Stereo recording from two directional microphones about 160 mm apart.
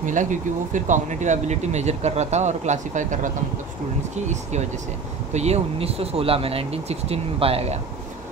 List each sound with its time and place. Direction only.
0.0 s speech: 50° right (ahead or behind)